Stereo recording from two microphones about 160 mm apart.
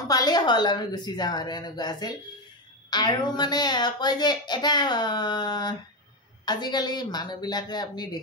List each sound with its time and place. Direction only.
0.1 s a woman's voice: 25° left (ahead or behind)